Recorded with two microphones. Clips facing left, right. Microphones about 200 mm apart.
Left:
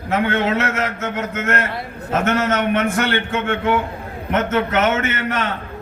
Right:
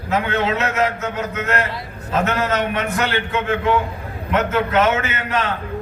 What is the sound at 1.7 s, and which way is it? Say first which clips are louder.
Speech: even; 50° left (ahead or behind).